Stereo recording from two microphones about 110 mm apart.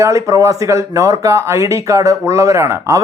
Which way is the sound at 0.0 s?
30° right (ahead or behind).